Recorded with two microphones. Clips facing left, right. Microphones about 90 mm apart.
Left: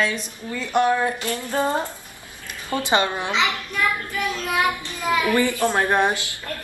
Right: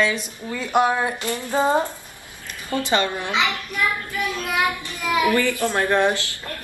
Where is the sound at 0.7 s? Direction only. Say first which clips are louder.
Even; 15° right (ahead or behind).